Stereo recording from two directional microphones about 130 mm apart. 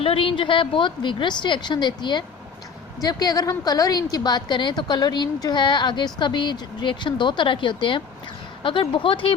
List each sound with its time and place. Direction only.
0.0 s a woman's voice: 45° left (ahead or behind)